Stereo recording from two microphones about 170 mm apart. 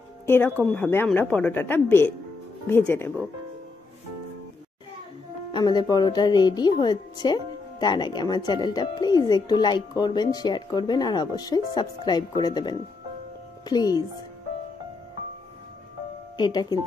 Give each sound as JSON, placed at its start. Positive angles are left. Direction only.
{"t": 0.7, "sound": "a woman's voice", "side_deg": 10}
{"t": 5.5, "sound": "a woman's voice", "side_deg": 25}
{"t": 16.3, "sound": "a woman's voice", "side_deg": 25}